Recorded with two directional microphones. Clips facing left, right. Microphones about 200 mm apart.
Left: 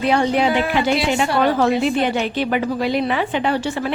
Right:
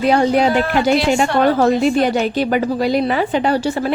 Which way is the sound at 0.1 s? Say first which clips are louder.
Right 3 dB; 40° right (ahead or behind).